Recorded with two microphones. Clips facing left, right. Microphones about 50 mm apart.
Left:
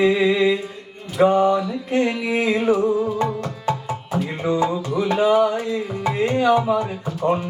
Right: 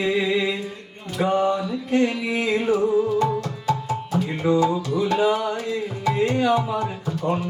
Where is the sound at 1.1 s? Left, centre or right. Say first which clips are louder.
Left 5 dB; left.